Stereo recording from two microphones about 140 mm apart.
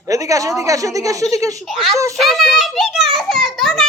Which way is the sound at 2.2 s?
Centre (ahead or behind).